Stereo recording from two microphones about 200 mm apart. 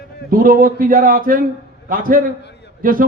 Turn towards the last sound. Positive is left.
turn(degrees=-45)  # may be behind; listen again after turning